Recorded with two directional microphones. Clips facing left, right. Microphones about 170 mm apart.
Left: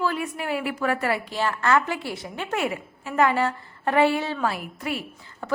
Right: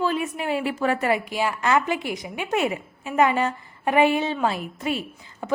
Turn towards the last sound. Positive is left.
turn(degrees=-25)  # may be behind; listen again after turning